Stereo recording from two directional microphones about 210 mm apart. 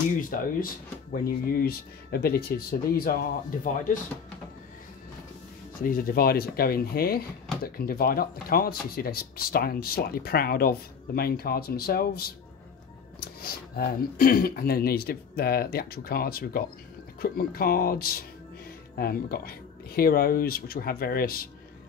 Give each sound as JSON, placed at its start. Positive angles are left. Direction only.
{"t": 0.2, "sound": "speech", "side_deg": 40}
{"t": 5.8, "sound": "speech", "side_deg": 40}